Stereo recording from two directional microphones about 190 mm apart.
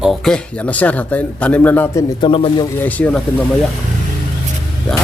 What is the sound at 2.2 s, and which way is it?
Speech, 25° left (ahead or behind).